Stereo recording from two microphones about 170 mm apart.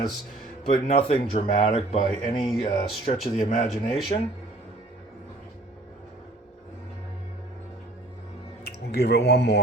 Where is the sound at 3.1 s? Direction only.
45° left (ahead or behind).